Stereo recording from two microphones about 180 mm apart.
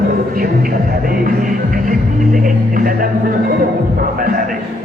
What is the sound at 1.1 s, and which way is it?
Music, 50° right (ahead or behind).